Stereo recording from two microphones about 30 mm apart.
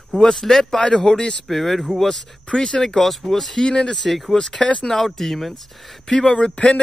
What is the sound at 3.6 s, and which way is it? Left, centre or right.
Speech, left.